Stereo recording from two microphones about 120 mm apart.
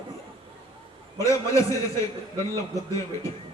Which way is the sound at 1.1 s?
25° left (ahead or behind).